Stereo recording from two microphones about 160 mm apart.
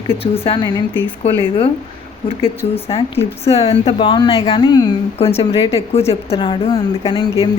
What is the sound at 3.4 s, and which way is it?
Speech, 40° left (ahead or behind).